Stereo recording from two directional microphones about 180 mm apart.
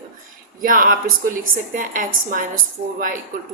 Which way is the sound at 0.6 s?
50° right (ahead or behind).